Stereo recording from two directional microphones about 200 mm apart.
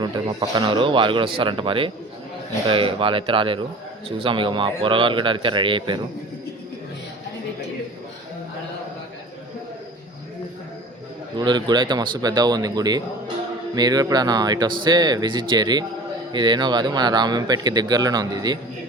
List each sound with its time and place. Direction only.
0.0 s speech: 20° right (ahead or behind)
11.3 s speech: 20° right (ahead or behind)